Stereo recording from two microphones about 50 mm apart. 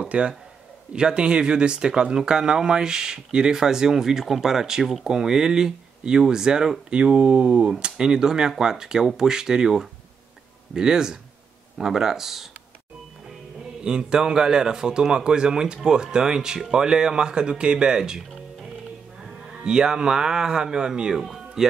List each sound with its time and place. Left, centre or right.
0.1 s a man's voice: right; by 7.0 s centre
7.0 s speech: right
7.8 s a man's voice: centre
13.8 s a man's voice: centre
19.2 s moo: centre